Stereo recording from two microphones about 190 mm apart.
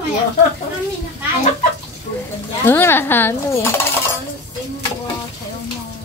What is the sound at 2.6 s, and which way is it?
Speech, 10° left (ahead or behind).